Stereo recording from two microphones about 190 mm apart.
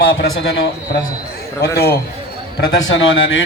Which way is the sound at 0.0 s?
60° left (ahead or behind).